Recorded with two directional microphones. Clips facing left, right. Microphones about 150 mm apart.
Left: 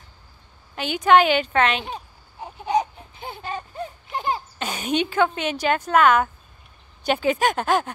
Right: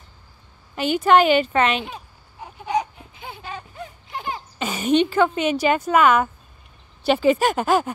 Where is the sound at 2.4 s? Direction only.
30° left (ahead or behind).